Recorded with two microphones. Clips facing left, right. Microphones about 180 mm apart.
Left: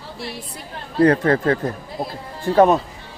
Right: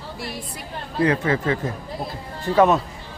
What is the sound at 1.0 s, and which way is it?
Speech, 45° left (ahead or behind).